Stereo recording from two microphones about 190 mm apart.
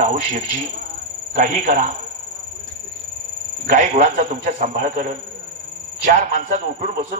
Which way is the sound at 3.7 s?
40° right (ahead or behind).